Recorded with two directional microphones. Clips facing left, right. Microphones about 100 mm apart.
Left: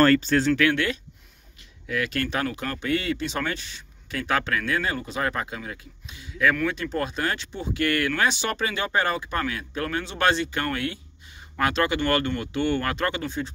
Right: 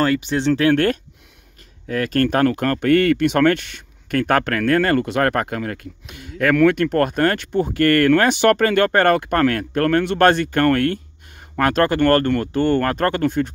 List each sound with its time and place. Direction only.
0.0 s speech: 15° right (ahead or behind)
0.5 s speech: 30° right (ahead or behind)
1.9 s speech: 45° right (ahead or behind)
6.5 s speech: 70° right (ahead or behind)